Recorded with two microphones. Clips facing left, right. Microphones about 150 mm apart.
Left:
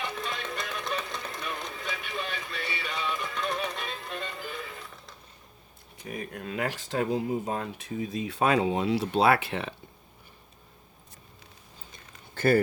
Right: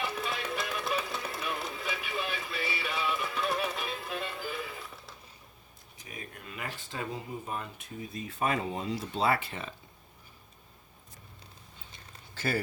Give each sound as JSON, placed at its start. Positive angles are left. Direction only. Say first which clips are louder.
{"t": 0.0, "sound": "music", "louder": "even", "side_deg": -5}
{"t": 6.0, "sound": "speech", "louder": "left 9 dB", "side_deg": 65}
{"t": 12.3, "sound": "a sound", "louder": "left 10 dB", "side_deg": 55}